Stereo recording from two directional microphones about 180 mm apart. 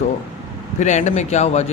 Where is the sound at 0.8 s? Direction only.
40° left (ahead or behind).